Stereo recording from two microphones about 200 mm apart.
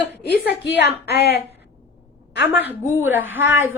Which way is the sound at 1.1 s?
55° left (ahead or behind).